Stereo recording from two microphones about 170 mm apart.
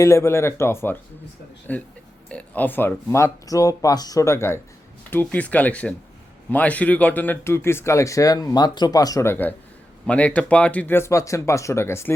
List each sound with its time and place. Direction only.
0.0 s speech: 15° left (ahead or behind)